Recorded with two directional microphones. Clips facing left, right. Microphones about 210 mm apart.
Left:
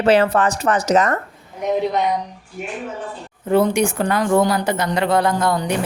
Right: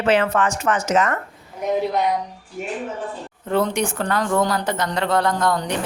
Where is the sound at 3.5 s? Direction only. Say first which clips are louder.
Left 5 dB; 10° left (ahead or behind).